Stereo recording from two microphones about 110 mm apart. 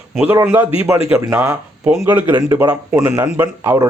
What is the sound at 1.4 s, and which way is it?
Speech, 20° right (ahead or behind).